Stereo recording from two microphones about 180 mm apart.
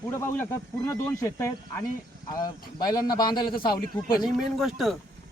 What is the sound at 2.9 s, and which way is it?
Speech, 20° left (ahead or behind).